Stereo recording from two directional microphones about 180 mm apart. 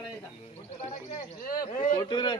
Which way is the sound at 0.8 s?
40° left (ahead or behind).